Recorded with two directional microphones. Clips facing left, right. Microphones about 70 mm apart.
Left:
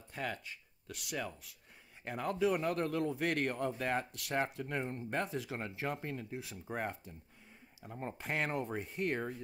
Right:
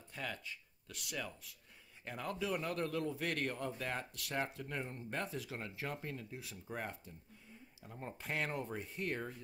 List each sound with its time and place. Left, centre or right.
0.1 s speech: left
2.0 s speech: left